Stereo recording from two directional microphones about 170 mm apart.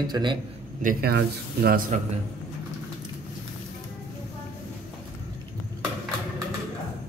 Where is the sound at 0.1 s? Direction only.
25° right (ahead or behind).